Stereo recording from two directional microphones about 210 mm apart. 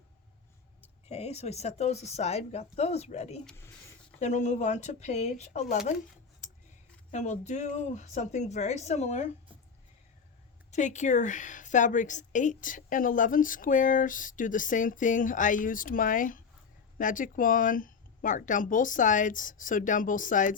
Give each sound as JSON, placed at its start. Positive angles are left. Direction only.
{"t": 1.0, "sound": "a woman's voice", "side_deg": 30}
{"t": 3.4, "sound": "speech", "side_deg": 10}
{"t": 4.2, "sound": "a woman's voice", "side_deg": 35}
{"t": 6.4, "sound": "a sound", "side_deg": 35}
{"t": 7.1, "sound": "a woman's voice", "side_deg": 35}
{"t": 10.7, "sound": "a woman's voice", "side_deg": 35}